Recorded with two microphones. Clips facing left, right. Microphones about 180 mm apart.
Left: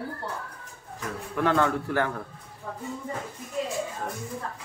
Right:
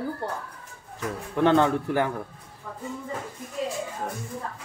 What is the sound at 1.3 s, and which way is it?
Speech, 25° right (ahead or behind).